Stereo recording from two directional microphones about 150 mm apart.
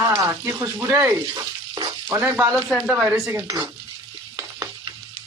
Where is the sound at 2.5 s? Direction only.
Centre (ahead or behind); by 3.7 s 25° right (ahead or behind).